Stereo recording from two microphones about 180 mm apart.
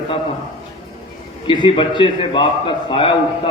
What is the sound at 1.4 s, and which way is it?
A man's voice, 25° left (ahead or behind).